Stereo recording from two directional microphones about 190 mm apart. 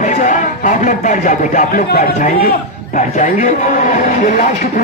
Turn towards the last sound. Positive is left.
turn(degrees=40)  # may be behind; listen again after turning